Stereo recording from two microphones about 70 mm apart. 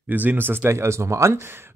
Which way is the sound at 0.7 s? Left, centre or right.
Right.